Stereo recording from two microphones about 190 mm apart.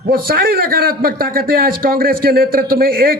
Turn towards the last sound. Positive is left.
turn(degrees=-50)  # may be behind; listen again after turning